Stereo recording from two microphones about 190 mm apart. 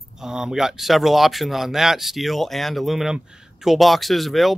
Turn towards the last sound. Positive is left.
turn(degrees=0)  # may be behind; listen again after turning